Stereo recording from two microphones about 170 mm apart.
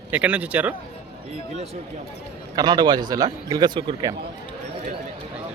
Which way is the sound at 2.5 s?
25° right (ahead or behind).